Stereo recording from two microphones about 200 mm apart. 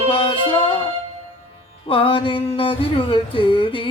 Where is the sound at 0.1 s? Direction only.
25° left (ahead or behind).